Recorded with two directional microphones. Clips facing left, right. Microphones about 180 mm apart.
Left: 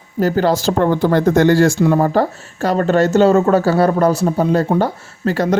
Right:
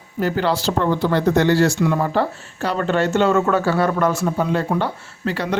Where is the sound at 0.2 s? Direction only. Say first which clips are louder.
Left 5 dB; 40° left (ahead or behind).